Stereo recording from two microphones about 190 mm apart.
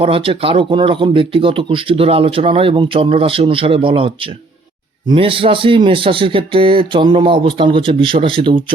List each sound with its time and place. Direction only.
0.0 s speech: 30° right (ahead or behind)